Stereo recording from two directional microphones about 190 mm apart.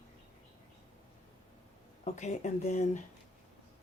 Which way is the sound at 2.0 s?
35° left (ahead or behind).